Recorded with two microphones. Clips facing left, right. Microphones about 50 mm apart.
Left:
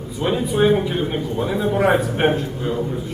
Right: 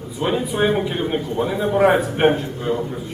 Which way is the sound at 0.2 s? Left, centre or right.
Centre.